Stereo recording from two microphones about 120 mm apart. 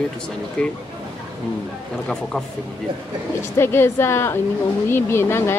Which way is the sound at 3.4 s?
20° left (ahead or behind).